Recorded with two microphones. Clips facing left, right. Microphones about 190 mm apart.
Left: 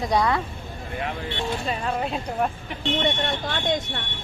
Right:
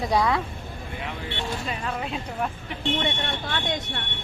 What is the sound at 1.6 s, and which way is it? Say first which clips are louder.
Speech: left 4 dB; 35° left (ahead or behind).